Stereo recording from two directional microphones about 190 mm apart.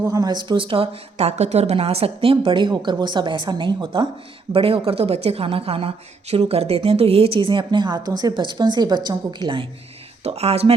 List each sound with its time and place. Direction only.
0.0 s a woman's voice: 20° right (ahead or behind)